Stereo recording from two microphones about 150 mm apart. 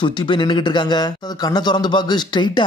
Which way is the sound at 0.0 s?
30° left (ahead or behind).